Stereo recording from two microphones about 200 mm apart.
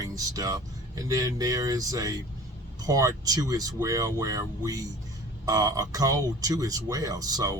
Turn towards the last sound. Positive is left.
turn(degrees=-15)  # may be behind; listen again after turning